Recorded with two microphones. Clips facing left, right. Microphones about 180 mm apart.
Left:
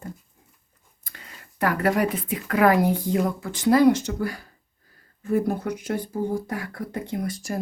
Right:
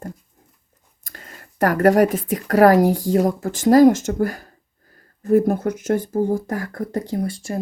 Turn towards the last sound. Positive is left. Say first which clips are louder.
# right 4 dB
turn(degrees=-30)  # may be behind; listen again after turning